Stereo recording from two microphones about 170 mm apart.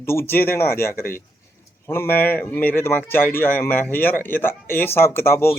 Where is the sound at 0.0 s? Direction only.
15° left (ahead or behind).